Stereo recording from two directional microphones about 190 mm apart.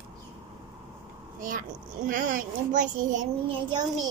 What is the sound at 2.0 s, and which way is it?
Speech, 45° right (ahead or behind).